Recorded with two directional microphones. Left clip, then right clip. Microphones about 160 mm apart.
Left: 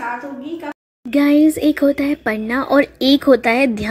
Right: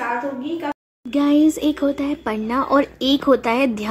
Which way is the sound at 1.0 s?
20° left (ahead or behind).